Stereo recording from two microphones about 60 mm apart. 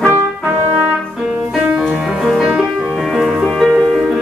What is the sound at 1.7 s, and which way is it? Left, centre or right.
Music, centre.